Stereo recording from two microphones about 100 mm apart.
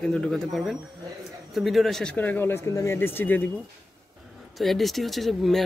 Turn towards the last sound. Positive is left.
turn(degrees=0)  # may be behind; listen again after turning